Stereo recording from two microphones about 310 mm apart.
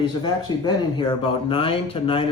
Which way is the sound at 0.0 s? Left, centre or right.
Centre.